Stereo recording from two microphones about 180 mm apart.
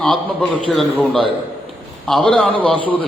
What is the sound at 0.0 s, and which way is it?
A man's voice, 5° left (ahead or behind).